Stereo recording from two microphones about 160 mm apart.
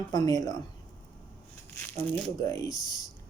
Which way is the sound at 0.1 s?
25° left (ahead or behind).